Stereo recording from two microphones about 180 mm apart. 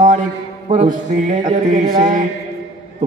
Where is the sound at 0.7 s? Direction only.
45° right (ahead or behind).